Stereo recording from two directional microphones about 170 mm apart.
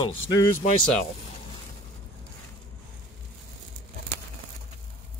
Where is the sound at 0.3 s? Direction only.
25° left (ahead or behind).